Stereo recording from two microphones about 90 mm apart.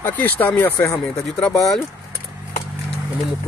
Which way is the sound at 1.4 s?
5° left (ahead or behind).